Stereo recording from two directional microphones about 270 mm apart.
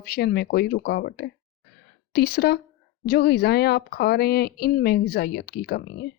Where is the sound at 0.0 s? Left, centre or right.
Left.